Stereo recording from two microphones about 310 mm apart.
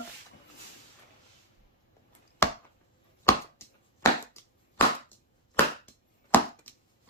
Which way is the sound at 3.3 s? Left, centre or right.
Centre.